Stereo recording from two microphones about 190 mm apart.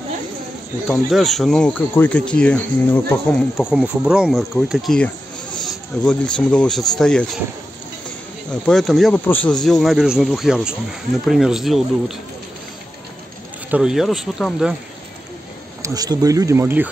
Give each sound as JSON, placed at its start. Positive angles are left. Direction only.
{"t": 0.8, "sound": "speech", "side_deg": 0}
{"t": 3.6, "sound": "a man's voice", "side_deg": -5}
{"t": 8.5, "sound": "speech", "side_deg": 0}
{"t": 13.7, "sound": "speech", "side_deg": -5}
{"t": 15.8, "sound": "speech", "side_deg": -20}